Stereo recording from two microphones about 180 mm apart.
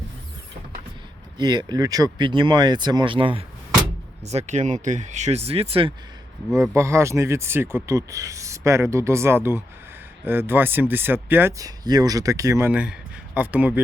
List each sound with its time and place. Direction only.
1.4 s speech: 25° right (ahead or behind)
6.6 s speech: 15° right (ahead or behind)